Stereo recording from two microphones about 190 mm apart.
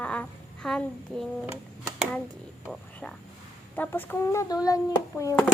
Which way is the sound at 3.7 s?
10° left (ahead or behind).